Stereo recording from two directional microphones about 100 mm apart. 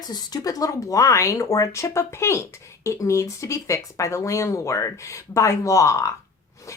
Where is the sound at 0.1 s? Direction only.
40° left (ahead or behind).